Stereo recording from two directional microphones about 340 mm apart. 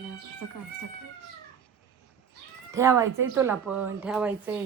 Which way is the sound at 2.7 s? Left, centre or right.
Centre.